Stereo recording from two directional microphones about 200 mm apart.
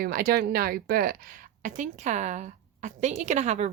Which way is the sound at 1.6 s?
40° right (ahead or behind).